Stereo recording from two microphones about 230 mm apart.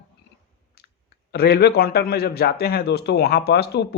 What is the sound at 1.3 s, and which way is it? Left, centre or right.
A man's voice, left.